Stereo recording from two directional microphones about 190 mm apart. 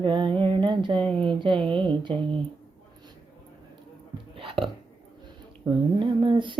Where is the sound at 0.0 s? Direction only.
25° right (ahead or behind).